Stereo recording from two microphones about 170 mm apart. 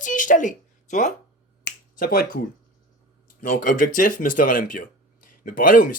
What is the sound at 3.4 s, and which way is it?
Speech, 55° left (ahead or behind).